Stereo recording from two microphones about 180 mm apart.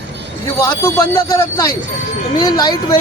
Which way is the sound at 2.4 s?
20° left (ahead or behind).